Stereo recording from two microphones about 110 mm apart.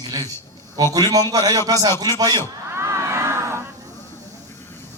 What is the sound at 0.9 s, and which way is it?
A man's voice, 35° right (ahead or behind).